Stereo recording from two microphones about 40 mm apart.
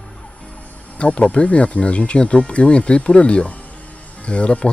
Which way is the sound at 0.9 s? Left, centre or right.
Left.